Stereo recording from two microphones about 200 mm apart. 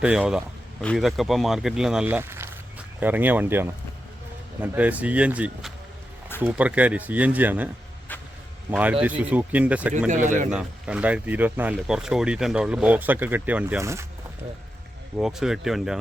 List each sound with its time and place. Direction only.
0.0 s speech: 5° right (ahead or behind)
8.7 s speech: 5° right (ahead or behind)
10.1 s a man's voice: 40° right (ahead or behind)
10.5 s speech: 5° right (ahead or behind)
15.1 s speech: 5° right (ahead or behind)